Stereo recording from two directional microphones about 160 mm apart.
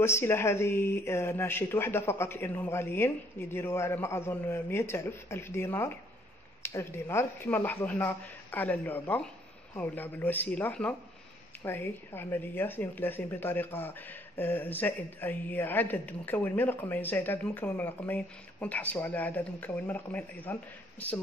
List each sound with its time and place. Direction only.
0.0 s speech: 15° left (ahead or behind)